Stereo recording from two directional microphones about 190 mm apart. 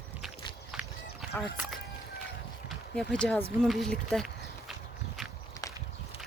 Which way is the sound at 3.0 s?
5° left (ahead or behind).